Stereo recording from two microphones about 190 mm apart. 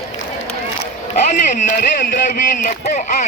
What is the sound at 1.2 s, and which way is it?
Speech, 40° left (ahead or behind).